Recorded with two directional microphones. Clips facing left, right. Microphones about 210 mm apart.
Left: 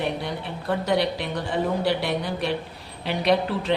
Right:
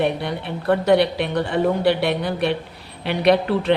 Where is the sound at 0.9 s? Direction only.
65° right (ahead or behind).